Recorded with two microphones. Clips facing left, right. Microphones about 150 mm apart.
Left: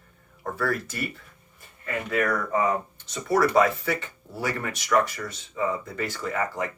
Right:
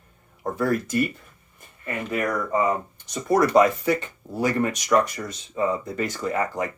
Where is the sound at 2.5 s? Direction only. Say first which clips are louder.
Right 2 dB; 15° right (ahead or behind).